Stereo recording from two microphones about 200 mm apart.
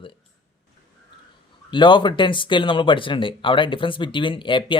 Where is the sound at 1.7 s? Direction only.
20° left (ahead or behind).